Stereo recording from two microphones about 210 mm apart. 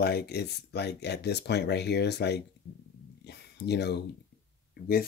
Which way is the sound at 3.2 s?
50° left (ahead or behind).